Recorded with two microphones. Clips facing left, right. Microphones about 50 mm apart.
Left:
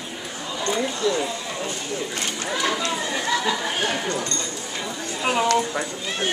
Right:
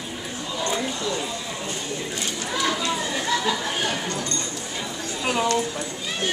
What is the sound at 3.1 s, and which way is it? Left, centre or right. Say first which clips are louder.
Chatter: left 2 dB; centre.